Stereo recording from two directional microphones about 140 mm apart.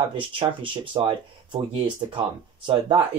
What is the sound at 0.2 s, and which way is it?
Speech, 40° right (ahead or behind).